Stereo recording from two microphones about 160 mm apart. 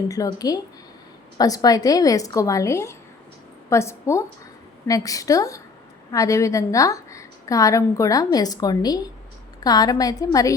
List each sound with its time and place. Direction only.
0.1 s a woman's voice: 20° left (ahead or behind)